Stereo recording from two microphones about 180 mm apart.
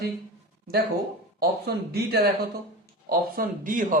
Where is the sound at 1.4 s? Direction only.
60° right (ahead or behind).